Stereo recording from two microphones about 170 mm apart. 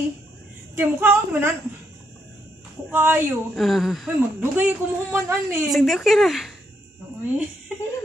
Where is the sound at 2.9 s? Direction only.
15° right (ahead or behind).